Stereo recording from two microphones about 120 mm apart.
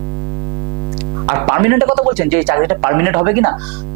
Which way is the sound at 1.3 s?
25° right (ahead or behind).